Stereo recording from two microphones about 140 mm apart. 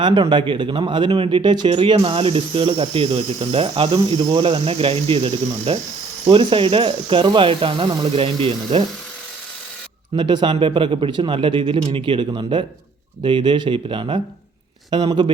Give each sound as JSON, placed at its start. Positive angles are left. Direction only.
{"t": 0.0, "sound": "speech", "side_deg": -35}
{"t": 10.2, "sound": "speech", "side_deg": -30}